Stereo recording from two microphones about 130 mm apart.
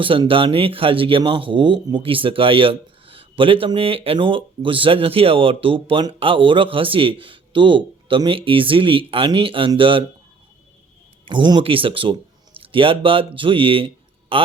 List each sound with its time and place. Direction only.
0.0 s speech: 40° right (ahead or behind)
11.3 s speech: 35° right (ahead or behind)